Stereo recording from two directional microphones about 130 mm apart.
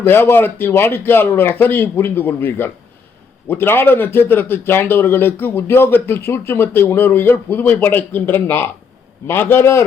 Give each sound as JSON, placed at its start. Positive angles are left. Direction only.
{"t": 0.0, "sound": "a man's voice", "side_deg": 15}